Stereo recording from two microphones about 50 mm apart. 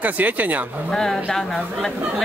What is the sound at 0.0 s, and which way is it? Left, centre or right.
Speech, right.